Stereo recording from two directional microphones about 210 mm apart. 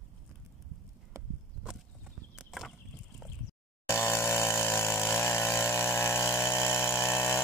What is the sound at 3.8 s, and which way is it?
Chainsaw, 10° left (ahead or behind).